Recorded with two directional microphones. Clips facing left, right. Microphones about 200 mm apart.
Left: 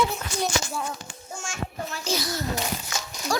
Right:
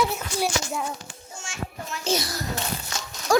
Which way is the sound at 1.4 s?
45° left (ahead or behind).